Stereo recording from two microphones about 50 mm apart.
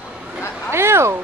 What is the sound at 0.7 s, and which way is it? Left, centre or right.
Speech, right.